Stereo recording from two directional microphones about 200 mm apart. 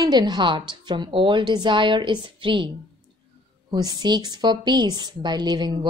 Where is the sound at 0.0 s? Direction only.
20° right (ahead or behind).